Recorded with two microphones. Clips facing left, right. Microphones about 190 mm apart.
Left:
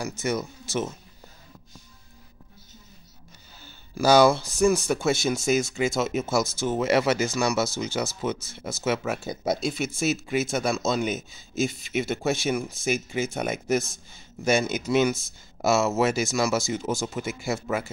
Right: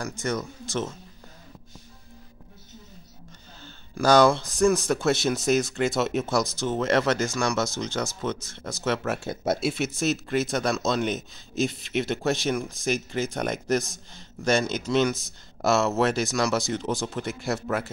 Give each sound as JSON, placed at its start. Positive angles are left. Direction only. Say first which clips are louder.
{"t": 0.2, "sound": "speech", "louder": "left 1 dB", "side_deg": 5}
{"t": 3.6, "sound": "speech", "louder": "left 1 dB", "side_deg": 5}